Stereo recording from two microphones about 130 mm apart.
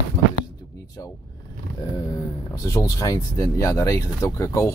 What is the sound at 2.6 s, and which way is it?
Speech, 25° left (ahead or behind).